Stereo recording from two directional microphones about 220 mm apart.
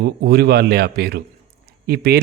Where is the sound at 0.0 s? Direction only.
45° right (ahead or behind).